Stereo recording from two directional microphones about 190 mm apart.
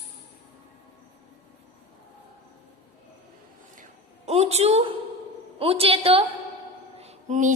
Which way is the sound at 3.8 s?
35° right (ahead or behind).